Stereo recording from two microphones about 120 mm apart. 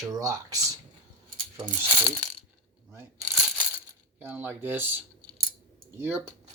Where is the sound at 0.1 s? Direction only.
30° right (ahead or behind).